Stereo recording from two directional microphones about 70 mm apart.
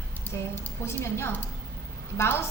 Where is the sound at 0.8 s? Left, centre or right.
Left.